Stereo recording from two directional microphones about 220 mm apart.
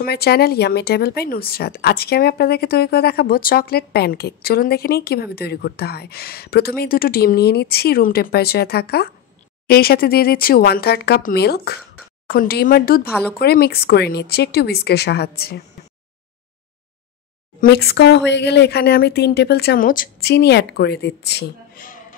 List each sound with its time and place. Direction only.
0.0 s speech: 45° left (ahead or behind)
17.6 s speech: 45° left (ahead or behind)